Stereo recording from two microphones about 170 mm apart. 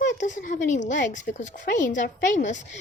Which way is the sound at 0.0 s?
45° left (ahead or behind).